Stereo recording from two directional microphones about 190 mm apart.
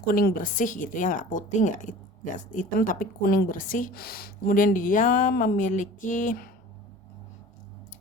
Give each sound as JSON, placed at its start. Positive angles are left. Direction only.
{"t": 0.0, "sound": "a woman's voice", "side_deg": 50}